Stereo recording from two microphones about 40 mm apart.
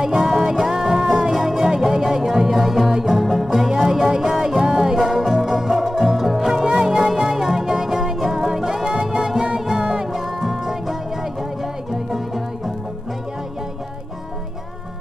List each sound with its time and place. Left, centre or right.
0.0 s music: centre
1.3 s music: centre
3.7 s music: centre
8.8 s music: right
10.1 s music: centre